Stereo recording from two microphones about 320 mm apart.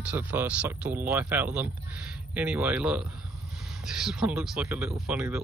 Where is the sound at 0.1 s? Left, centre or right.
Centre.